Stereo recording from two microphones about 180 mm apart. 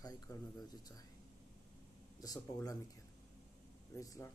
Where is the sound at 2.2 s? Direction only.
20° left (ahead or behind).